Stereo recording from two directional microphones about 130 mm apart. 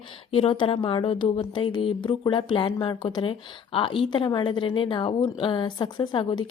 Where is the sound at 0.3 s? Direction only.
45° left (ahead or behind).